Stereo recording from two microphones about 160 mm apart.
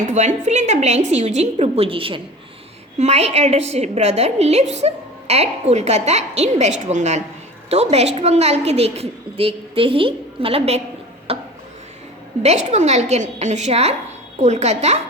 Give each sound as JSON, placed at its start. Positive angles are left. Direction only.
{"t": 0.0, "sound": "a woman's voice", "side_deg": -50}
{"t": 11.3, "sound": "a sound", "side_deg": -35}
{"t": 12.4, "sound": "a woman's voice", "side_deg": -45}